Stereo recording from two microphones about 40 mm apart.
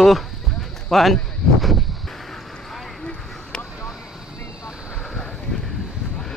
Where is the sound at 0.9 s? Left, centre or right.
Centre.